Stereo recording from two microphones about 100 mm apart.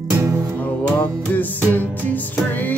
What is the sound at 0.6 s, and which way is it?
Music, 15° left (ahead or behind).